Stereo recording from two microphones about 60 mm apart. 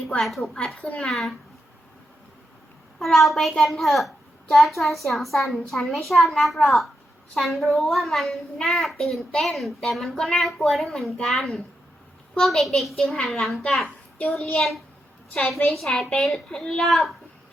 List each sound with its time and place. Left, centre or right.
0.2 s a woman's voice: centre
3.0 s a woman's voice: centre
15.3 s a woman's voice: centre
15.6 s a woman's voice: centre